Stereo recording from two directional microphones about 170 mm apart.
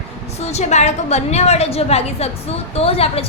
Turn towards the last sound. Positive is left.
turn(degrees=35)  # may be behind; listen again after turning